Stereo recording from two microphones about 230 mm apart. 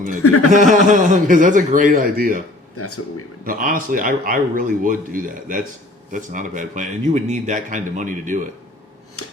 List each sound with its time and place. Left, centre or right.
0.2 s speech: left
0.5 s a man's voice: right
2.7 s speech: left
3.4 s a man's voice: right
9.2 s scissors: left